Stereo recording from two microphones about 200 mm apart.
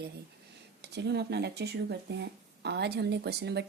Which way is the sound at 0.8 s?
60° right (ahead or behind).